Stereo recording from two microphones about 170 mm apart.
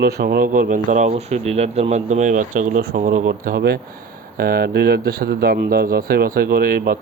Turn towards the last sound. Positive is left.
turn(degrees=-60)  # may be behind; listen again after turning